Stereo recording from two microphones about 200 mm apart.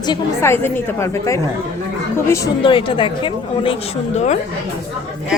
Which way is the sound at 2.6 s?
25° left (ahead or behind).